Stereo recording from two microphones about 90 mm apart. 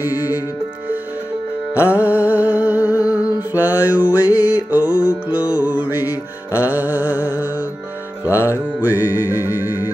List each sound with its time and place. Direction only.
0.0 s music: 20° right (ahead or behind)
1.9 s a sound: 15° right (ahead or behind)
3.1 s music: 15° right (ahead or behind)
6.6 s a sound: 20° right (ahead or behind)
8.3 s music: 35° left (ahead or behind)
8.8 s music: 20° right (ahead or behind)